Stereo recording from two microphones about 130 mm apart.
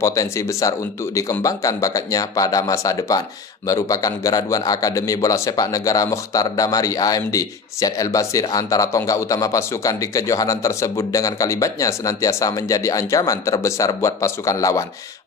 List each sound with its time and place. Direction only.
0.0 s speech: 25° left (ahead or behind)